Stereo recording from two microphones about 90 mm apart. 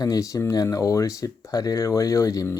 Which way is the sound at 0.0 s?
40° left (ahead or behind).